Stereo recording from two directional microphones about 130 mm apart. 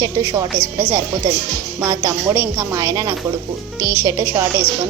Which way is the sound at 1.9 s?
25° right (ahead or behind).